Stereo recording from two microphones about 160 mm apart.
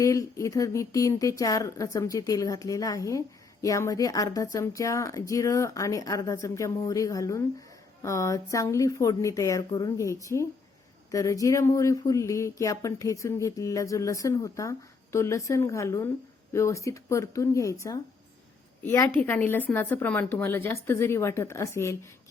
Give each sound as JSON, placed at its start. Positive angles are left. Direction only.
{"t": 0.0, "sound": "a woman's voice", "side_deg": 20}